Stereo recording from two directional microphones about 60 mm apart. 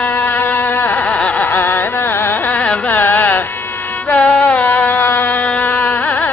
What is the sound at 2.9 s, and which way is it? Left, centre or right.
Carnatic music, left.